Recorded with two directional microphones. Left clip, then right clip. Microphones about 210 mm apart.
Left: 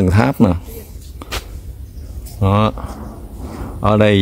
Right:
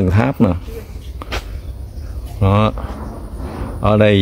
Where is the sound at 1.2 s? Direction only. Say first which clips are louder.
Right 1 dB; 15° left (ahead or behind).